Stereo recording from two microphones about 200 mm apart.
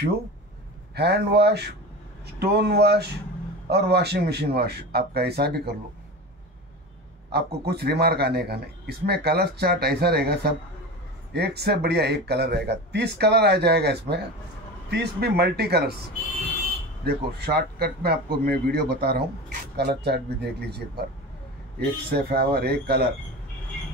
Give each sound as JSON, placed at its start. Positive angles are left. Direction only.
{"t": 0.9, "sound": "a man's voice", "side_deg": -55}
{"t": 7.2, "sound": "a man's voice", "side_deg": -55}
{"t": 17.0, "sound": "a man's voice", "side_deg": -55}